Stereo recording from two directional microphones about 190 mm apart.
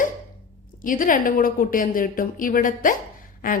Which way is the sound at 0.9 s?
45° left (ahead or behind).